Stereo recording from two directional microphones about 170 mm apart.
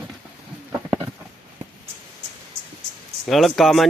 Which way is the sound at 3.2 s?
Centre (ahead or behind).